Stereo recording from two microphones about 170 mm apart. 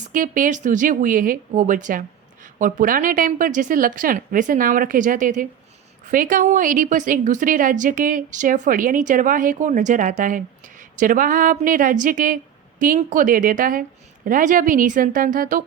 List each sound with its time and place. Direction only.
0.0 s a woman's voice: 50° right (ahead or behind)